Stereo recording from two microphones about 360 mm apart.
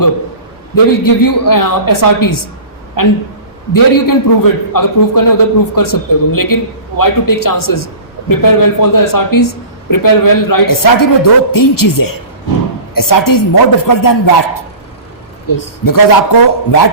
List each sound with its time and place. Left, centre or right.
0.9 s a man's voice: left